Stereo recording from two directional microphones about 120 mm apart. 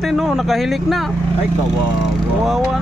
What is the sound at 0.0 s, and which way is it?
Speech, centre (ahead or behind).